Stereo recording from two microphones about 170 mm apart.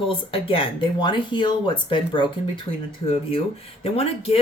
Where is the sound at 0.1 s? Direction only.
30° left (ahead or behind).